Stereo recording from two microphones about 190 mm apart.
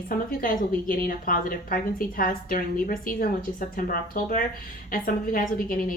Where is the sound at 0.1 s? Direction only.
50° left (ahead or behind).